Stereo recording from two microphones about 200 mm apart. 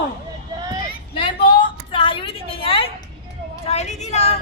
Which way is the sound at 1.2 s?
25° left (ahead or behind).